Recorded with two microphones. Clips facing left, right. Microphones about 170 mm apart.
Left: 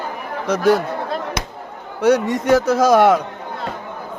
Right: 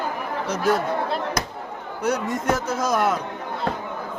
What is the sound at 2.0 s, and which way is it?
A man's voice, 85° left.